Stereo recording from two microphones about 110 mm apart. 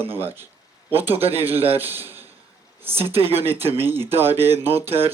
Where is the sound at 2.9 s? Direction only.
65° right (ahead or behind).